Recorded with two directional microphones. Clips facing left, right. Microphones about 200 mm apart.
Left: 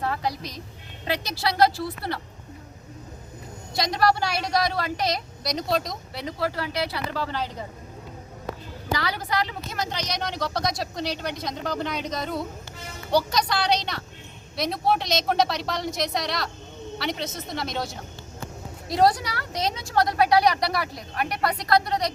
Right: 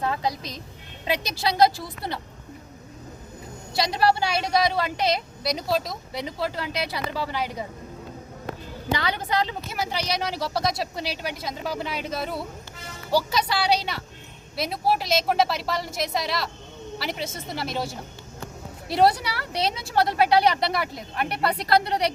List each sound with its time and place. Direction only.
0.0 s a woman's voice: 20° right (ahead or behind)
4.0 s speech: 25° right (ahead or behind)
5.4 s speech: 5° right (ahead or behind)
6.4 s speech: 20° right (ahead or behind)
8.9 s speech: 20° right (ahead or behind)
9.6 s speech: 10° right (ahead or behind)
19.5 s speech: 30° right (ahead or behind)